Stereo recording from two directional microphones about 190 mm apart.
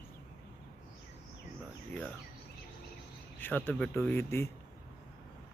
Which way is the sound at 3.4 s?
10° left (ahead or behind).